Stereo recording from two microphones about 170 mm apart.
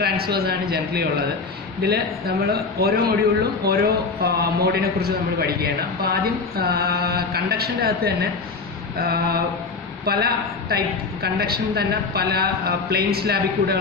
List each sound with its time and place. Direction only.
0.0 s a man's voice: 65° right (ahead or behind)